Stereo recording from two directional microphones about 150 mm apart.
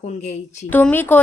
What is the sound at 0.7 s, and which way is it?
Speech, 10° left (ahead or behind).